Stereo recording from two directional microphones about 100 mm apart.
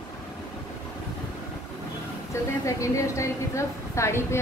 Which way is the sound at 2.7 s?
30° left (ahead or behind).